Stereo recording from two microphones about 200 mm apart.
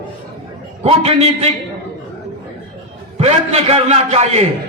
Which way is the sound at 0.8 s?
30° right (ahead or behind).